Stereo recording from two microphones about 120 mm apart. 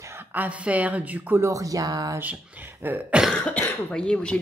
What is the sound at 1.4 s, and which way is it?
Speech, 30° right (ahead or behind).